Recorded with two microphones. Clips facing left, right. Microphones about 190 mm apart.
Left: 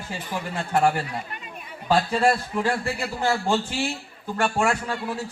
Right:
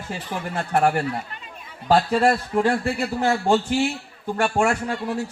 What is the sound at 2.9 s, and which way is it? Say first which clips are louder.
Speech: right 3 dB; 55° right (ahead or behind).